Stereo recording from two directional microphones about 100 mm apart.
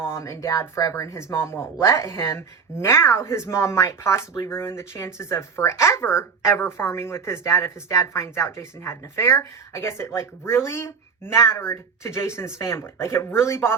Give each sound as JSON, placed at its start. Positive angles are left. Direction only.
{"t": 0.0, "sound": "speech", "side_deg": 25}